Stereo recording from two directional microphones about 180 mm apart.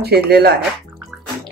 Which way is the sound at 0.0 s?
60° right (ahead or behind).